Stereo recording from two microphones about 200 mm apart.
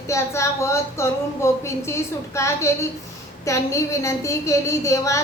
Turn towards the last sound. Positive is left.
turn(degrees=15)  # may be behind; listen again after turning